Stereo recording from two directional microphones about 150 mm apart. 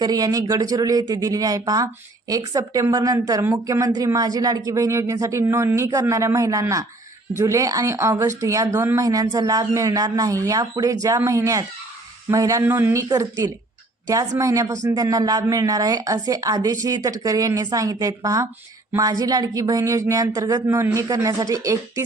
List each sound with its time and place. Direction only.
0.0 s speech: 25° right (ahead or behind)